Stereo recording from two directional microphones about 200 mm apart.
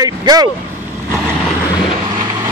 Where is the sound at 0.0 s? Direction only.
20° right (ahead or behind).